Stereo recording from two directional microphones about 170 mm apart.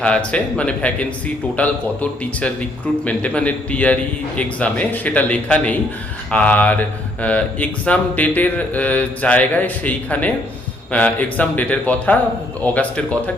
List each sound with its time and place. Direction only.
0.0 s speech: 5° left (ahead or behind)